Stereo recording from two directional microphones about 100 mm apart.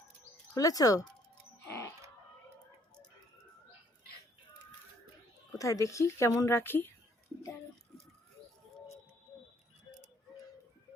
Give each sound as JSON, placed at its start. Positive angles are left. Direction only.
{"t": 0.5, "sound": "speech", "side_deg": 35}
{"t": 1.6, "sound": "music", "side_deg": 30}
{"t": 5.5, "sound": "a woman's voice", "side_deg": 35}